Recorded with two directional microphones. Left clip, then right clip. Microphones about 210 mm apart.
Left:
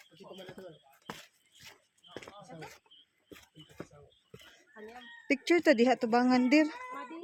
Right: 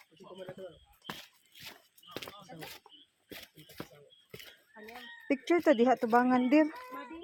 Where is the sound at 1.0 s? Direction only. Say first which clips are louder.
Right 2 dB; 30° right (ahead or behind).